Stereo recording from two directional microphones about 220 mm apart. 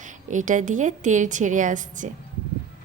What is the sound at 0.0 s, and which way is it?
A woman's voice, 35° right (ahead or behind).